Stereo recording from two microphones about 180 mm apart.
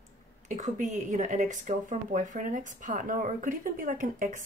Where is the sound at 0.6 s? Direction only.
40° right (ahead or behind).